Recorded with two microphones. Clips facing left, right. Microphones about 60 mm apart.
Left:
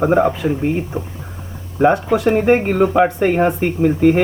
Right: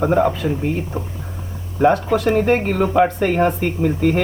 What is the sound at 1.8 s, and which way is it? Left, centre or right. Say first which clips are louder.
Speech: left 2 dB; centre.